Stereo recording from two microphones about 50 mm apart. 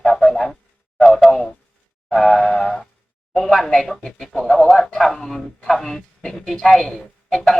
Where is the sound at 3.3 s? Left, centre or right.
Centre.